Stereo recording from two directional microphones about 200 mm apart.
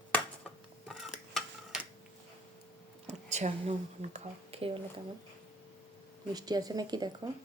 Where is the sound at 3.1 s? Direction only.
35° right (ahead or behind).